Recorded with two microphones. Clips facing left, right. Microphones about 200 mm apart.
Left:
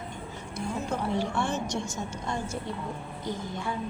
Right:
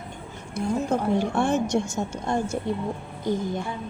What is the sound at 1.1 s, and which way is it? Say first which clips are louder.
A woman's voice: right 6 dB; 50° right (ahead or behind).